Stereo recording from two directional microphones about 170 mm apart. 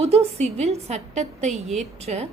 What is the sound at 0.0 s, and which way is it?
A woman's voice, 35° right (ahead or behind).